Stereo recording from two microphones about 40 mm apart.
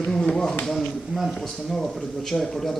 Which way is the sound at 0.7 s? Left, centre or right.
Centre.